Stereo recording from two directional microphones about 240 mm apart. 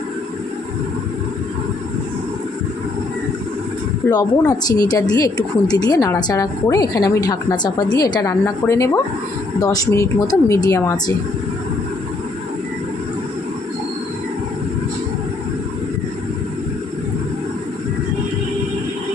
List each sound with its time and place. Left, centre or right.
4.1 s speech: centre